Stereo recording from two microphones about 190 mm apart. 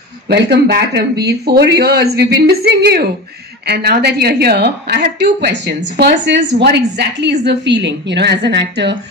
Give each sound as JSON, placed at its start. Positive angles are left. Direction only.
{"t": 0.3, "sound": "a woman's voice", "side_deg": -65}